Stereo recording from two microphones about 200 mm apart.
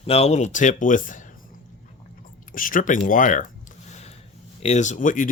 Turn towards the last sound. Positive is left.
turn(degrees=40)  # may be behind; listen again after turning